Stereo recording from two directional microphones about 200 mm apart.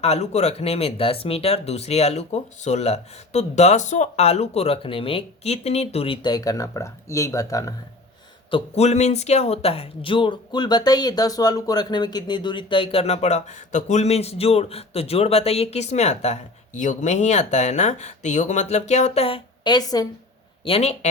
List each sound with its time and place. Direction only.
0.0 s speech: 35° left (ahead or behind); by 7.7 s 15° left (ahead or behind)
8.4 s speech: 30° left (ahead or behind)
20.7 s speech: 30° left (ahead or behind)